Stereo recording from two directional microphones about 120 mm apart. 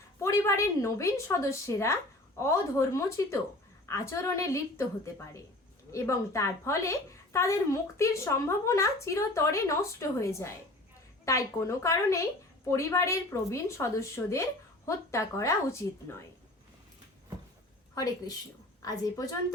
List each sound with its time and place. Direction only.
0.2 s a woman's voice: 25° left (ahead or behind)
17.9 s a woman's voice: 30° left (ahead or behind)